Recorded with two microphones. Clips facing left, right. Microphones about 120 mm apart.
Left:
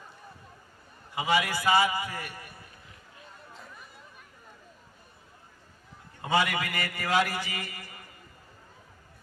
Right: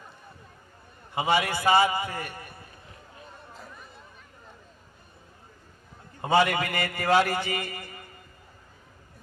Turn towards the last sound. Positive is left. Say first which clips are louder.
# right 6 dB
turn(degrees=-25)  # may be behind; listen again after turning